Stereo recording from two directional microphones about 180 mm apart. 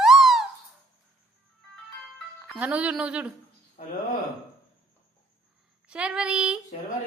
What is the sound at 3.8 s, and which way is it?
Speech, 45° left (ahead or behind).